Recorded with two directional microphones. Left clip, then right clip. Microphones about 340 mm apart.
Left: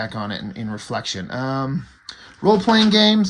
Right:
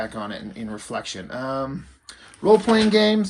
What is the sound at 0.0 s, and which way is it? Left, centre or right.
Speech, left.